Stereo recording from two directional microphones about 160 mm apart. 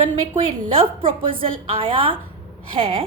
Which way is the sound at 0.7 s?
35° right (ahead or behind).